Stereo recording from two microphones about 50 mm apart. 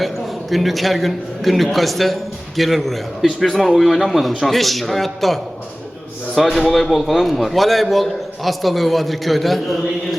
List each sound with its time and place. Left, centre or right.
0.5 s a man's voice: centre